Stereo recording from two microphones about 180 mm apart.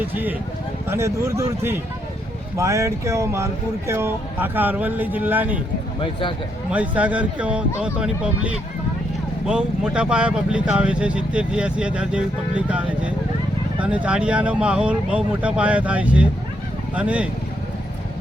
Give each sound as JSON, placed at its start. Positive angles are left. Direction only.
{"t": 0.0, "sound": "speech", "side_deg": -10}
{"t": 6.0, "sound": "speech", "side_deg": 30}
{"t": 6.7, "sound": "speech", "side_deg": -10}